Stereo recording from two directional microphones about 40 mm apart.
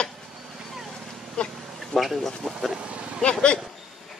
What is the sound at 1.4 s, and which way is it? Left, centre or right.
Duck, left.